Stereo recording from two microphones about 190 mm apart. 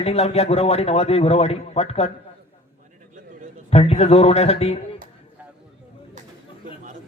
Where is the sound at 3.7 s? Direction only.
35° left (ahead or behind).